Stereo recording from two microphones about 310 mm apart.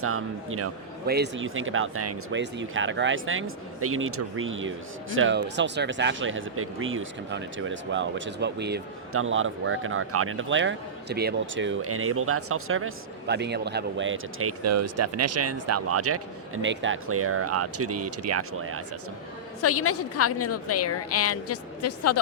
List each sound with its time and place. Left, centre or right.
0.0 s a man's voice: right
1.0 s speech: right
19.6 s a woman's voice: left